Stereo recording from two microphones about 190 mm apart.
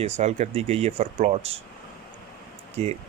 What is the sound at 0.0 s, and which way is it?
Speech, 35° right (ahead or behind).